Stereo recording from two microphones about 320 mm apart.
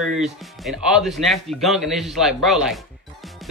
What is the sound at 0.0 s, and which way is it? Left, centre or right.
Speech, centre.